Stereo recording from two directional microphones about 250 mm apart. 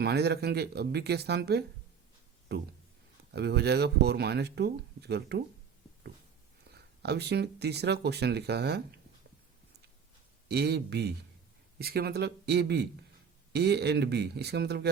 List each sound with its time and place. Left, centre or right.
0.0 s speech: right
6.7 s speech: right
10.5 s speech: right